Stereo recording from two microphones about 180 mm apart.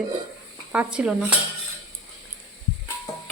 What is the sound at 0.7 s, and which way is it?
Speech, 5° right (ahead or behind).